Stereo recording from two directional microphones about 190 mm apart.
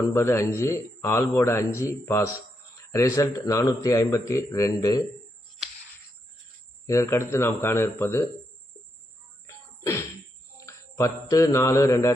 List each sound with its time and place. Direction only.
0.1 s a man's voice: 15° left (ahead or behind)
2.7 s a sound: 15° left (ahead or behind)
3.2 s a man's voice: 15° left (ahead or behind)
6.8 s a man's voice: 15° left (ahead or behind)
9.5 s music: 15° left (ahead or behind)
10.6 s mantra: 15° left (ahead or behind)